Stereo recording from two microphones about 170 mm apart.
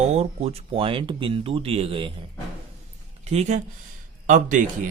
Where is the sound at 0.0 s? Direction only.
40° right (ahead or behind).